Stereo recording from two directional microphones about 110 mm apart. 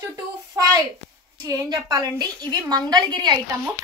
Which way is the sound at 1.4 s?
35° right (ahead or behind).